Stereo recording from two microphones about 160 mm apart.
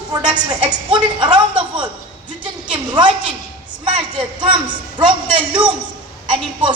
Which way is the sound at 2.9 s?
30° right (ahead or behind).